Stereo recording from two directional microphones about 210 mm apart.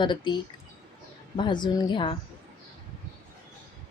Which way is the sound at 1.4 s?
20° left (ahead or behind).